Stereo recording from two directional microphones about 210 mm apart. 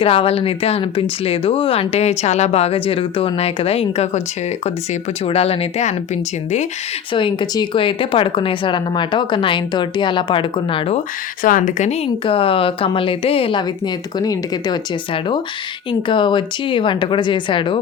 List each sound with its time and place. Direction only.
0.0 s a woman's voice: 25° left (ahead or behind)
7.1 s a woman's voice: 25° left (ahead or behind)
11.4 s a woman's voice: 40° left (ahead or behind); by 17.7 s 25° left (ahead or behind)